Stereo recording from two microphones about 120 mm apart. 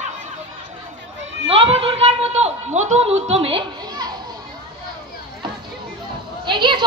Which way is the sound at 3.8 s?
35° right (ahead or behind).